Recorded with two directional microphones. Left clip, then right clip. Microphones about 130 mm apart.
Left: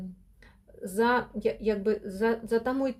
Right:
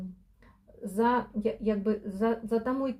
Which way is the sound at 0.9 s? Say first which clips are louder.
Left 1 dB; 30° left (ahead or behind).